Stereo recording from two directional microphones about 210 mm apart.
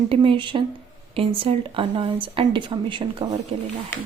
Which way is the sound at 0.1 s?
25° right (ahead or behind).